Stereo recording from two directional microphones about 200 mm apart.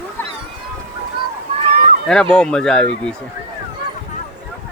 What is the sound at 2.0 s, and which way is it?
Speech, 5° left (ahead or behind).